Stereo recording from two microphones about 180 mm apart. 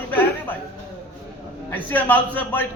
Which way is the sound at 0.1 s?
10° left (ahead or behind).